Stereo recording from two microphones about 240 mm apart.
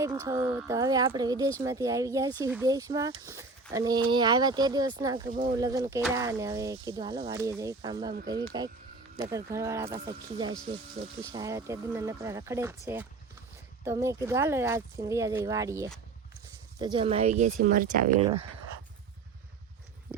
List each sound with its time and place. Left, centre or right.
0.0 s speech: centre
5.3 s speech: right
5.5 s speech: centre; by 18.3 s right